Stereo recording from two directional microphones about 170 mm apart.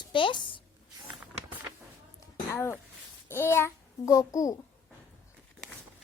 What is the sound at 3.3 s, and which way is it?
A child's voice, 15° left (ahead or behind).